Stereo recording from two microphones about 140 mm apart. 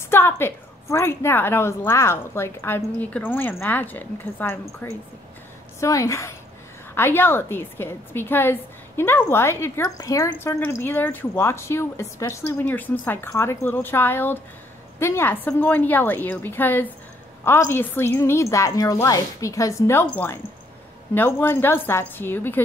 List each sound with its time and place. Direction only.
0.1 s a woman's voice: 15° left (ahead or behind)